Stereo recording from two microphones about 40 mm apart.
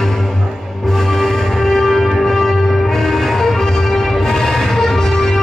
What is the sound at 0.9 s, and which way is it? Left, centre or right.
Music, centre.